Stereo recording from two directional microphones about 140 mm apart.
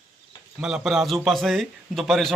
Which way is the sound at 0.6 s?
5° right (ahead or behind).